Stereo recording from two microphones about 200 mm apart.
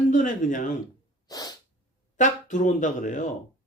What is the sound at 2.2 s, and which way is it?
Speech, 40° left (ahead or behind).